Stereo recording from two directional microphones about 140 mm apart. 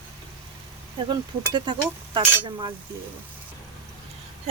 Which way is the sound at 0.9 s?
30° right (ahead or behind).